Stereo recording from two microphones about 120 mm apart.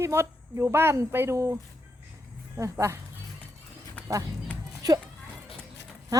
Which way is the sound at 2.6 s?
25° right (ahead or behind).